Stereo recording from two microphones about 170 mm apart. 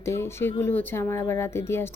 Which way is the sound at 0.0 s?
15° left (ahead or behind).